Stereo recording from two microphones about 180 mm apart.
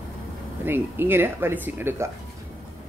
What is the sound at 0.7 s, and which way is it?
Speech, 10° right (ahead or behind).